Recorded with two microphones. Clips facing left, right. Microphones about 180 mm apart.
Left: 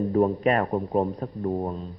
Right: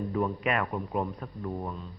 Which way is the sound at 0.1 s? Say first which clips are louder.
Left 8 dB; 40° left (ahead or behind).